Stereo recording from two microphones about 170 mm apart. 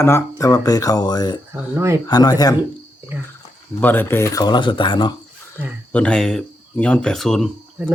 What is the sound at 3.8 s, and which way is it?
Speech, 10° left (ahead or behind).